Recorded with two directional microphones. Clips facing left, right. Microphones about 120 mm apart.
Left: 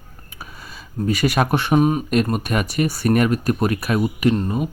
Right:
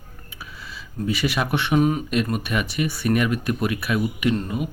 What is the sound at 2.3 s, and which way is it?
Speech, 45° left (ahead or behind).